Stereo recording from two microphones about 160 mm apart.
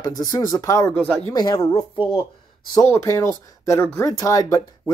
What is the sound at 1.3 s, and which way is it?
Speech, 25° left (ahead or behind).